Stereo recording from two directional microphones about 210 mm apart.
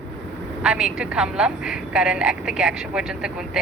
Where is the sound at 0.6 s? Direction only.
5° right (ahead or behind).